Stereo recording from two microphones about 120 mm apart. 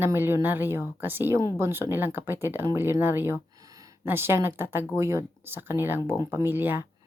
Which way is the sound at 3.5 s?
30° right (ahead or behind).